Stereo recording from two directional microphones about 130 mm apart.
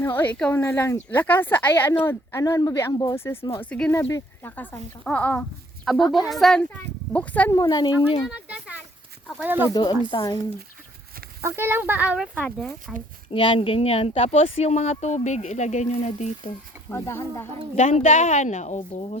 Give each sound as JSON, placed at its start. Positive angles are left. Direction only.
{"t": 0.0, "sound": "speech", "side_deg": 15}
{"t": 3.6, "sound": "speech", "side_deg": 10}
{"t": 7.5, "sound": "speech", "side_deg": 30}
{"t": 8.3, "sound": "a sound", "side_deg": -5}
{"t": 9.4, "sound": "speech", "side_deg": -15}
{"t": 9.7, "sound": "speech", "side_deg": 30}
{"t": 11.4, "sound": "speech", "side_deg": -20}
{"t": 13.3, "sound": "speech", "side_deg": 40}
{"t": 16.9, "sound": "speech", "side_deg": 20}
{"t": 17.7, "sound": "speech", "side_deg": 65}